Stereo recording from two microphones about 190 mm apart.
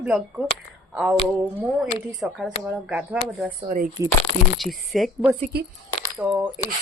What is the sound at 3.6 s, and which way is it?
Speech, 50° right (ahead or behind).